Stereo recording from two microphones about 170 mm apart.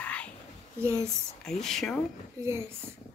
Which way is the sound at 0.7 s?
15° right (ahead or behind).